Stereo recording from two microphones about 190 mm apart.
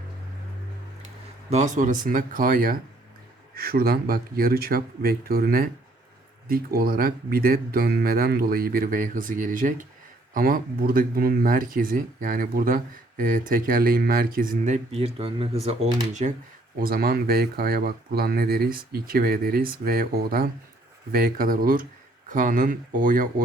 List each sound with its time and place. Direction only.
1.5 s speech: 40° right (ahead or behind)
16.8 s speech: 50° right (ahead or behind)